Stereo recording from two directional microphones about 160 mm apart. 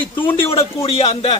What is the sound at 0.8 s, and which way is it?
Speech, 40° left (ahead or behind).